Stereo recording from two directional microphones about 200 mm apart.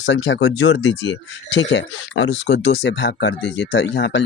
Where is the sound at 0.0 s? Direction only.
70° left (ahead or behind).